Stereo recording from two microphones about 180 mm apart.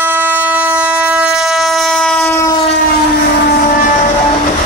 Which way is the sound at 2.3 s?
15° left (ahead or behind).